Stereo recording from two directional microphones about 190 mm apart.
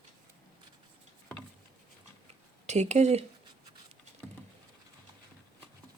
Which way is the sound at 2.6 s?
35° right (ahead or behind).